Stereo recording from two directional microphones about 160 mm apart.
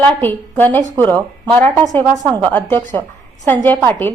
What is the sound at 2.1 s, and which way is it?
Speech, 30° right (ahead or behind).